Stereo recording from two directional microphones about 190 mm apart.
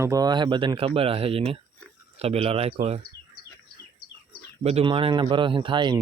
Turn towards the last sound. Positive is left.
turn(degrees=-25)  # may be behind; listen again after turning